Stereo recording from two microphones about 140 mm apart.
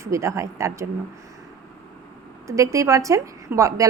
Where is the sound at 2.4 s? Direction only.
20° right (ahead or behind).